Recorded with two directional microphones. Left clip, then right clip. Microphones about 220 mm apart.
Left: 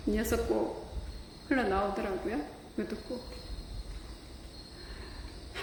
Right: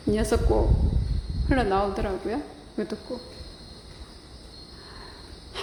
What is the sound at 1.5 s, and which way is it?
A woman's voice, 15° right (ahead or behind).